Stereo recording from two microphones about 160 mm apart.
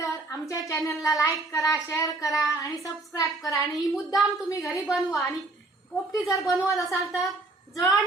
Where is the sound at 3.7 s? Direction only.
Centre (ahead or behind).